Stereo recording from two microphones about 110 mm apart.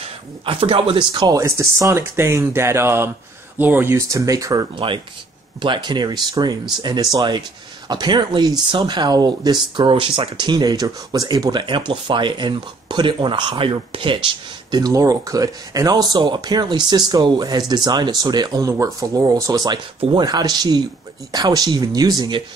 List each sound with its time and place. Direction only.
0.5 s speech: 55° right (ahead or behind)
1.3 s speech: 25° right (ahead or behind)
4.7 s speech: 50° right (ahead or behind)